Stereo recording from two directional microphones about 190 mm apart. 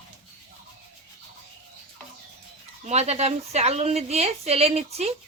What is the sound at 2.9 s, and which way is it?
A woman's voice, 35° right (ahead or behind).